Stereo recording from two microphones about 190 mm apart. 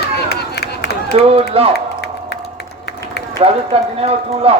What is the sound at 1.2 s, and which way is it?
Speech, 30° right (ahead or behind).